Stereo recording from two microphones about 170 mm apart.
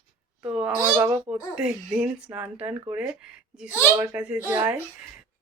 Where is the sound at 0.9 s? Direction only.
20° right (ahead or behind).